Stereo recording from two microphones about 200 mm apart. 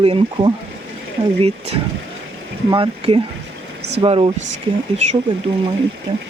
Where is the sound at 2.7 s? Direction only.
25° right (ahead or behind).